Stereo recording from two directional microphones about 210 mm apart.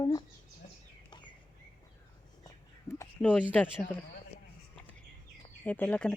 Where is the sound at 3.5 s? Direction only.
10° left (ahead or behind).